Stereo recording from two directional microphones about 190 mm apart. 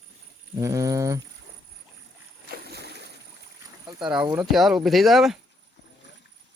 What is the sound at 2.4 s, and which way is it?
Boat, 55° right (ahead or behind).